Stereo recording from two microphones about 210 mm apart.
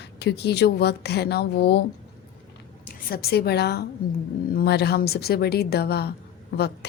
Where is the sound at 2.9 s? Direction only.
45° left (ahead or behind).